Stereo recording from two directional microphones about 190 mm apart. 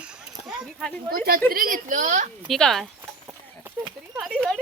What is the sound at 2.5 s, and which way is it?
Speech, centre (ahead or behind).